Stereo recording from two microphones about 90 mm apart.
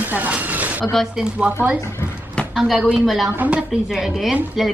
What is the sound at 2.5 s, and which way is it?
Speech, centre (ahead or behind).